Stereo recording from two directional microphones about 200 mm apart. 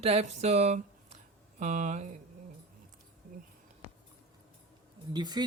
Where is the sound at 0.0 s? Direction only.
30° right (ahead or behind).